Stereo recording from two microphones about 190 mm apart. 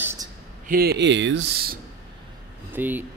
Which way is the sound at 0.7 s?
55° right (ahead or behind).